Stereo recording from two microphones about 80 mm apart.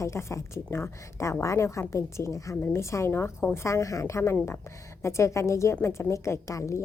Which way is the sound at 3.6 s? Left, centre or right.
Left.